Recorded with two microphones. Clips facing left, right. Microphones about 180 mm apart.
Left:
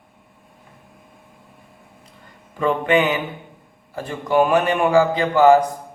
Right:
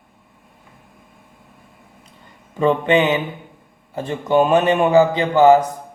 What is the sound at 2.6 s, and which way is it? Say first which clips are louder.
A man's voice: right 2 dB; 25° right (ahead or behind).